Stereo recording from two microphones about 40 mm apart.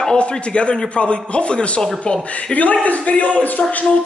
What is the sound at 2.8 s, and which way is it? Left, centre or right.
Speech, left.